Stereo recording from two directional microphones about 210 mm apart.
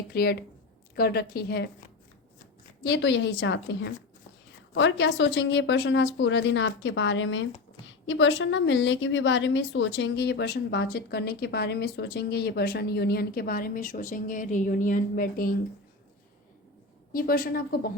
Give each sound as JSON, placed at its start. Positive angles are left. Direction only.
{"t": 0.1, "sound": "a woman's voice", "side_deg": 45}
{"t": 2.8, "sound": "a woman's voice", "side_deg": 55}
{"t": 17.1, "sound": "a woman's voice", "side_deg": 45}